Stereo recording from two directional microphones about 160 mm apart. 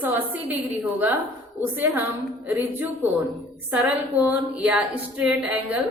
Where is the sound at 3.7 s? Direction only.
10° right (ahead or behind).